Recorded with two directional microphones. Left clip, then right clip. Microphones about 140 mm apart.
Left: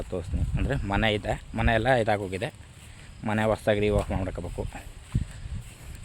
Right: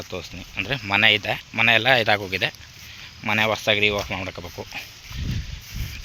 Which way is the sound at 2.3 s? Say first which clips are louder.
Right 8 dB; 15° left (ahead or behind).